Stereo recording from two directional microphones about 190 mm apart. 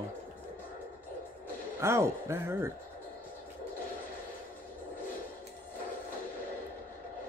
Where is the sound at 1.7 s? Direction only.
15° right (ahead or behind).